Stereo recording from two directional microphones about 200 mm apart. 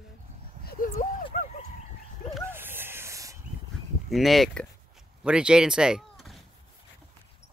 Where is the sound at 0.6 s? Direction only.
45° left (ahead or behind).